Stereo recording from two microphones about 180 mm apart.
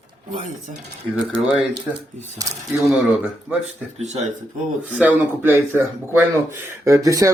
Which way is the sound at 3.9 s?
35° right (ahead or behind).